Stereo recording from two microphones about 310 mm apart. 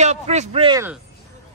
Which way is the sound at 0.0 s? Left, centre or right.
Right.